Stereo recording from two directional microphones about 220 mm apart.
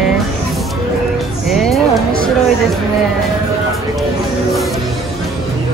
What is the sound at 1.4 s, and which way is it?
Speech, centre (ahead or behind).